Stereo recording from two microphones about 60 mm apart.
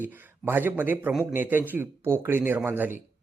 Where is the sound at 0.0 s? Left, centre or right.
Right.